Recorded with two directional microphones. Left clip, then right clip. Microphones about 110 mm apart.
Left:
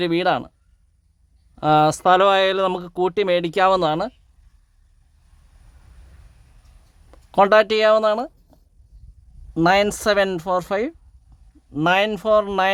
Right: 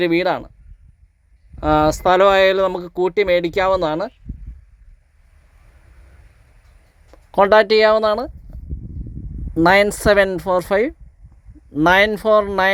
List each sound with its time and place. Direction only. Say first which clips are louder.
0.0 s speech: right 2 dB; centre (ahead or behind)
1.5 s speech: even; 5° left (ahead or behind)
3.5 s speech: even; 15° left (ahead or behind)
7.1 s speech: right 2 dB; centre (ahead or behind); by 8.3 s 15° right (ahead or behind)
9.6 s speech: right 4 dB; 25° right (ahead or behind)